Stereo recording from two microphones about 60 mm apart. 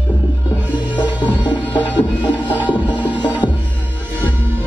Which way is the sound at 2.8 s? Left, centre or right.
Right.